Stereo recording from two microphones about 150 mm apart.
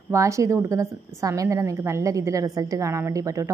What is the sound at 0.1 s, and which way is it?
A woman's voice, 20° right (ahead or behind).